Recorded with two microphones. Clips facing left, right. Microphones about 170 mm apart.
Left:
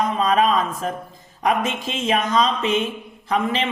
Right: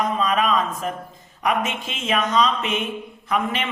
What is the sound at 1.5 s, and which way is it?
Speech, 35° left (ahead or behind).